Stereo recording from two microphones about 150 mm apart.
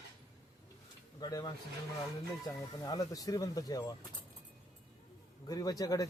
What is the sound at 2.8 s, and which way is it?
A man's voice, 25° left (ahead or behind).